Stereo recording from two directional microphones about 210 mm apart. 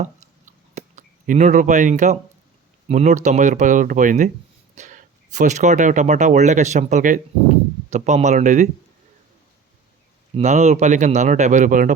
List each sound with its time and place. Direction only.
0.0 s a sound: 35° right (ahead or behind)
2.9 s speech: 35° right (ahead or behind)
10.3 s speech: 30° right (ahead or behind)